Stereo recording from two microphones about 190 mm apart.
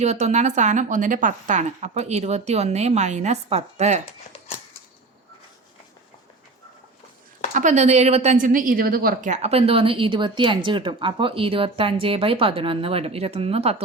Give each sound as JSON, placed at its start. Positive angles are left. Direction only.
{"t": 0.0, "sound": "a woman's voice", "side_deg": -35}
{"t": 7.5, "sound": "a woman's voice", "side_deg": -40}